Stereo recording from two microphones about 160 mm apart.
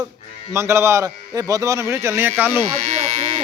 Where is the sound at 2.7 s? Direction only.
40° right (ahead or behind).